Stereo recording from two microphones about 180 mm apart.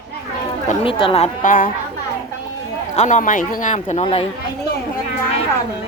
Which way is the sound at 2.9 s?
40° left (ahead or behind).